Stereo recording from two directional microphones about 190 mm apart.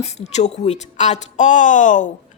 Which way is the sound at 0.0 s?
35° left (ahead or behind).